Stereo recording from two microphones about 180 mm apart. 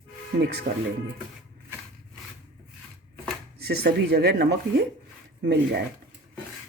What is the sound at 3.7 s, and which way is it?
Speech, 60° right (ahead or behind).